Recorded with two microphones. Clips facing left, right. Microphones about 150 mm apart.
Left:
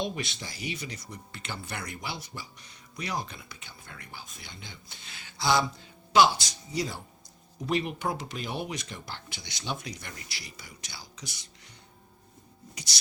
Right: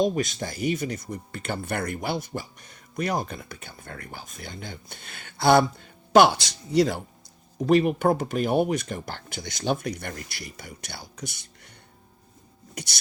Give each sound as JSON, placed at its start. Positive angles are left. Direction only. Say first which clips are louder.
{"t": 0.0, "sound": "speech", "louder": "right 9 dB", "side_deg": -45}
{"t": 7.7, "sound": "speech", "louder": "right 10 dB", "side_deg": -50}
{"t": 12.7, "sound": "beatboxing", "louder": "right 7 dB", "side_deg": -55}